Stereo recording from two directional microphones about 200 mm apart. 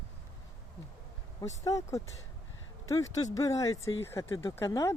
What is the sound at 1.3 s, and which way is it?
Speech, 15° left (ahead or behind).